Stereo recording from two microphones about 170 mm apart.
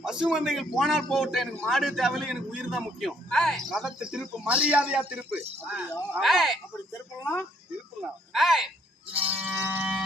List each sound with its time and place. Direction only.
0.0 s a man's voice: 5° right (ahead or behind)
6.9 s speech: 15° left (ahead or behind)
8.3 s speech: centre (ahead or behind)
9.1 s a sound: 10° right (ahead or behind)